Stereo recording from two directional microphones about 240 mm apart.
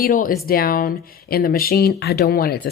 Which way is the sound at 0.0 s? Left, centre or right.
Left.